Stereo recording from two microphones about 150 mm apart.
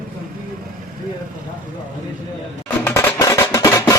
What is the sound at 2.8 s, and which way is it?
Music, 15° left (ahead or behind).